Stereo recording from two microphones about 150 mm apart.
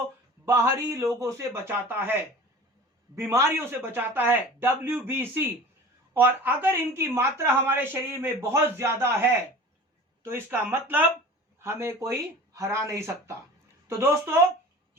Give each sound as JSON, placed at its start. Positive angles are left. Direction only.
{"t": 0.4, "sound": "speech", "side_deg": -20}
{"t": 3.2, "sound": "a woman's voice", "side_deg": -15}